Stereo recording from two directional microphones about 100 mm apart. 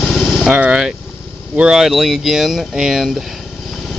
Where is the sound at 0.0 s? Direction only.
5° left (ahead or behind).